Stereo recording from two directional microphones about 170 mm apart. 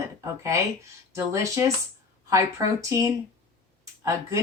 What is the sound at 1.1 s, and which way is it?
Speech, 15° right (ahead or behind).